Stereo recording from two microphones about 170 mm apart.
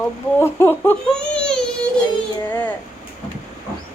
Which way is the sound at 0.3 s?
15° left (ahead or behind).